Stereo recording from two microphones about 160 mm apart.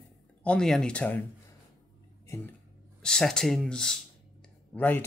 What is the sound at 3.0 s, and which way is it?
Speech, 5° left (ahead or behind).